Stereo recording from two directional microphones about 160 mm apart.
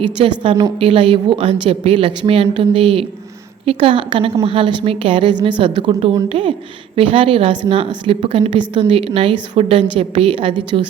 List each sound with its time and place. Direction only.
0.0 s a woman's voice: 35° right (ahead or behind)